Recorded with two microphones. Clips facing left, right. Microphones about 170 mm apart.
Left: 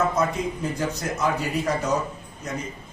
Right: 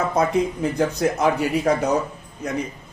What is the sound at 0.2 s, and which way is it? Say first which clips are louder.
A man's voice: right 5 dB; 60° right (ahead or behind).